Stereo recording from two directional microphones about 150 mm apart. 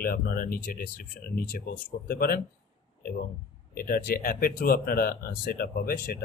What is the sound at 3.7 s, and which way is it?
Speech, 75° left (ahead or behind).